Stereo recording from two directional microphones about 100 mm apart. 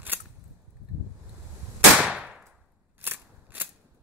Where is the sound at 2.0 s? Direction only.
10° right (ahead or behind).